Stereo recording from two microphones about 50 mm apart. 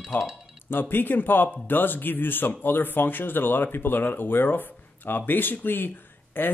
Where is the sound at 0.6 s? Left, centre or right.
Left.